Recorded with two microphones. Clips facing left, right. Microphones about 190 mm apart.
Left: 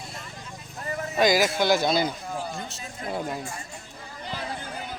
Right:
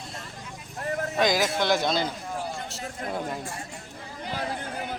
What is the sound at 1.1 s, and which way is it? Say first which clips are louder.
Speech: left 3 dB; 5° left (ahead or behind).